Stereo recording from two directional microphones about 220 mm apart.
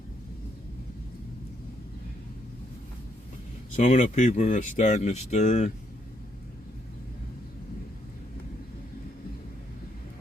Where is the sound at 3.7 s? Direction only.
30° left (ahead or behind).